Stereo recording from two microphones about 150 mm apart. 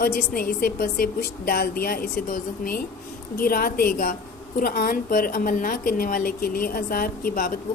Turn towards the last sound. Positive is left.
turn(degrees=80)